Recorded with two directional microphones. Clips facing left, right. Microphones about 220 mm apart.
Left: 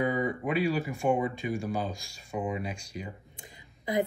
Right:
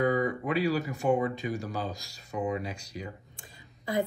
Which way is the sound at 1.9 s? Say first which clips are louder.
Even; 40° right (ahead or behind).